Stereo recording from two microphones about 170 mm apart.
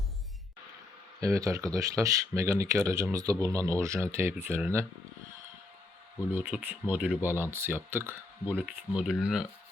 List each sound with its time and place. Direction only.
1.2 s speech: 20° right (ahead or behind)
6.3 s speech: 10° right (ahead or behind)